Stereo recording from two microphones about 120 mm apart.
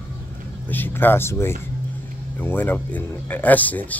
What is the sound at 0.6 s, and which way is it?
Speech, 15° left (ahead or behind).